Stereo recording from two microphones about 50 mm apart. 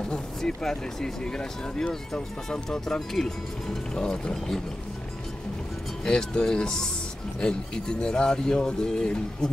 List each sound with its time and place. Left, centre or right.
0.4 s speech: centre
6.0 s speech: centre